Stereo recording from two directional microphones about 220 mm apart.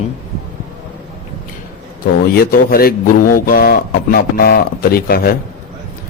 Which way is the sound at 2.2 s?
45° left (ahead or behind).